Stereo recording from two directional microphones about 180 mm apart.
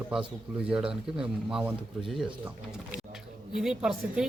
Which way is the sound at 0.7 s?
5° right (ahead or behind).